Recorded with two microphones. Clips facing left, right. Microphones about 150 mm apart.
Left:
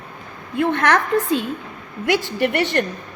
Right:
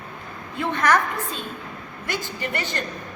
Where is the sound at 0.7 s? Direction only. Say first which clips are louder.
Left 2 dB; 65° left (ahead or behind).